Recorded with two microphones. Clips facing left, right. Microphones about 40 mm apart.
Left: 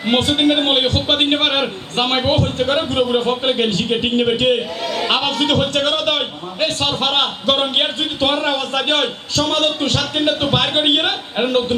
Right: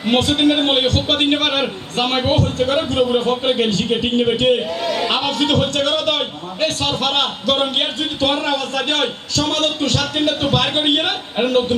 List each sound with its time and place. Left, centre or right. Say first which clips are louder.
0.1 s a man's voice: even; left